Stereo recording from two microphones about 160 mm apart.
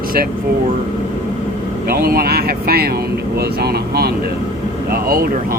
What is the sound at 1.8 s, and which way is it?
Speech, 65° right (ahead or behind).